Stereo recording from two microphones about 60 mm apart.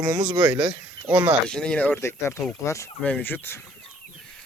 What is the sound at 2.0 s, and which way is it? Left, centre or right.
Speech, left.